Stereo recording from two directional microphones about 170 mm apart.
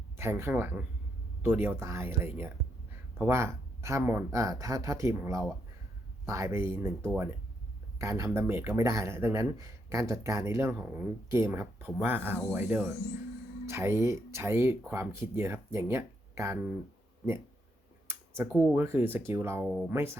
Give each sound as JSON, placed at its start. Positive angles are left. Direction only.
{"t": 0.2, "sound": "speech", "side_deg": -15}
{"t": 7.9, "sound": "speech", "side_deg": -20}
{"t": 18.5, "sound": "speech", "side_deg": -10}